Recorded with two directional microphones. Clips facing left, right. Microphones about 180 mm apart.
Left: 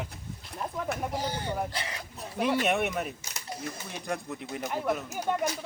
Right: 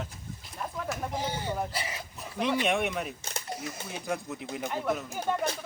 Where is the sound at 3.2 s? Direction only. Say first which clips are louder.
Right 5 dB; 55° right (ahead or behind).